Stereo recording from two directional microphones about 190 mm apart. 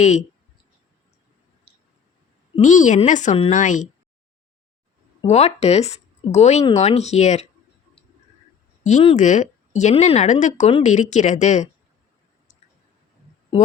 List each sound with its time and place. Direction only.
0.0 s speech: 35° left (ahead or behind)
2.6 s speech: 40° left (ahead or behind)
5.2 s speech: 35° left (ahead or behind)
8.8 s speech: 40° left (ahead or behind)